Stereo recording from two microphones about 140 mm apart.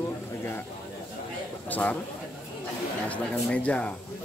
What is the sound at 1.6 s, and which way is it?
Speech, 10° left (ahead or behind).